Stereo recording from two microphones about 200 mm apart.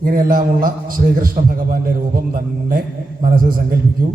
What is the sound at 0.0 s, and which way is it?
Mantra, 45° right (ahead or behind).